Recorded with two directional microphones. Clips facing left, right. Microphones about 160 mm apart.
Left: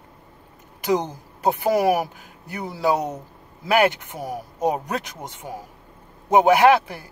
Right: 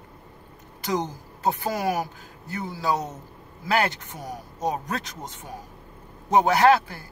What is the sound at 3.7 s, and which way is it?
Speech, 15° left (ahead or behind).